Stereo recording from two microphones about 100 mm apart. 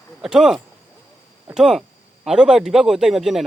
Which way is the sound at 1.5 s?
5° right (ahead or behind).